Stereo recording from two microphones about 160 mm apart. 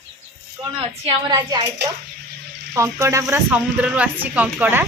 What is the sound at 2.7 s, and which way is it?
A woman's voice, 15° right (ahead or behind).